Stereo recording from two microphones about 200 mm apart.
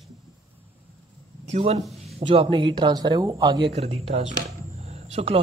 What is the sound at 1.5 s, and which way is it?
Speech, 35° right (ahead or behind).